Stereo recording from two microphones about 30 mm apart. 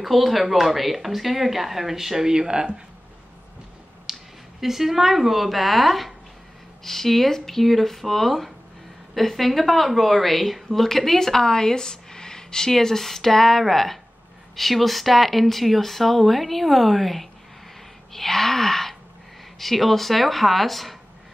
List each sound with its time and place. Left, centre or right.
0.0 s speech: centre; by 2.7 s right
4.1 s a woman's voice: centre